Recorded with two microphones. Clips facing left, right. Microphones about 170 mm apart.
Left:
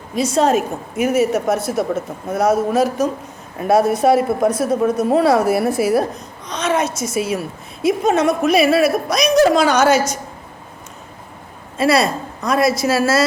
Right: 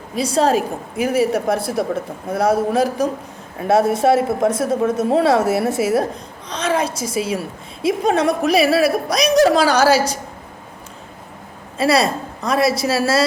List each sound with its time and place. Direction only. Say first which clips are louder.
0.2 s a woman's voice: left 1 dB; 30° right (ahead or behind)
1.7 s speech: left 1 dB; 25° left (ahead or behind)
2.3 s a woman's voice: left 1 dB; 30° right (ahead or behind)
11.8 s a woman's voice: left 1 dB; 30° right (ahead or behind)